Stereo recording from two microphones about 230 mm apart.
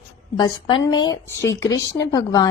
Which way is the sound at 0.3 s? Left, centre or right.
Centre.